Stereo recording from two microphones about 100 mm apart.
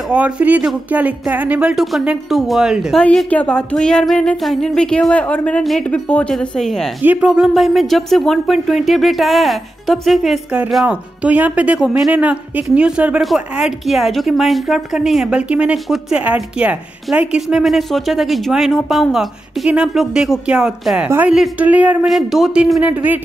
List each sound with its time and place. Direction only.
0.1 s a woman's voice: 15° right (ahead or behind)
3.3 s music: 15° left (ahead or behind)
5.6 s a woman's voice: centre (ahead or behind)
5.9 s music: 15° left (ahead or behind)
6.3 s a woman's voice: 5° left (ahead or behind)
7.0 s speech: 20° right (ahead or behind)
7.2 s a woman's voice: 5° right (ahead or behind)
10.9 s a woman's voice: 15° right (ahead or behind)
22.0 s speech: centre (ahead or behind)